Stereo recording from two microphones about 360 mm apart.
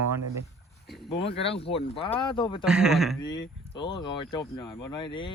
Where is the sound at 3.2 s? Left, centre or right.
Centre.